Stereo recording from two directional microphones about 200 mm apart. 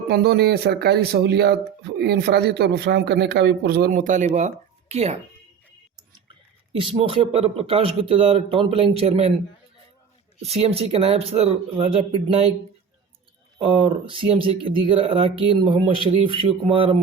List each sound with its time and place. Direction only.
0.1 s a man's voice: 55° right (ahead or behind); by 5.1 s 30° right (ahead or behind)
6.7 s speech: 25° right (ahead or behind)
10.4 s speech: 30° right (ahead or behind)
13.6 s speech: 25° right (ahead or behind)